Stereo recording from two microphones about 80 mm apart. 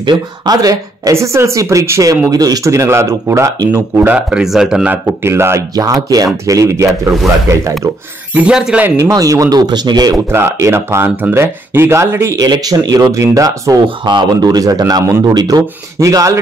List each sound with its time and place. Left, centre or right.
0.0 s speech: right
0.6 s speech: right
1.1 s speech: right
3.5 s speech: right
4.3 s speech: centre
5.2 s speech: right
5.8 s speech: right
8.4 s speech: centre
8.9 s speech: right
10.3 s speech: right
12.4 s speech: right
13.8 s speech: right